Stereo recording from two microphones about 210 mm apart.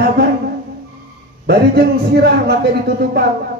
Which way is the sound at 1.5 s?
50° right (ahead or behind).